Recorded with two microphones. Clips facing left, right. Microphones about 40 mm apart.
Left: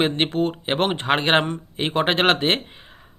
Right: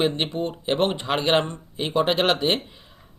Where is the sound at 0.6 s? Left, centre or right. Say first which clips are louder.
Left 2 dB; left.